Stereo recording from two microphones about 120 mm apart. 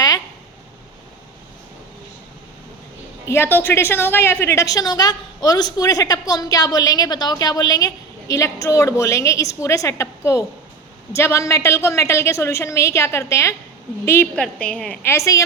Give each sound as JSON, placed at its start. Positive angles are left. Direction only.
{"t": 3.2, "sound": "a woman's voice", "side_deg": 20}
{"t": 14.3, "sound": "a woman's voice", "side_deg": 10}
{"t": 15.1, "sound": "a woman's voice", "side_deg": 25}